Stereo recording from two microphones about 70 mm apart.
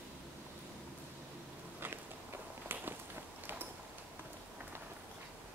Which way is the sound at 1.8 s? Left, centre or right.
Right.